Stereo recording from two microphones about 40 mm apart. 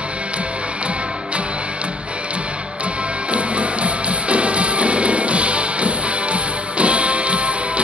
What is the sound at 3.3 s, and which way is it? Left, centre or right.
Music, right.